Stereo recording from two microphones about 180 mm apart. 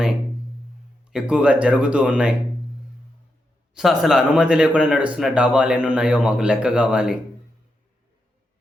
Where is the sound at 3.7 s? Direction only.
Centre (ahead or behind).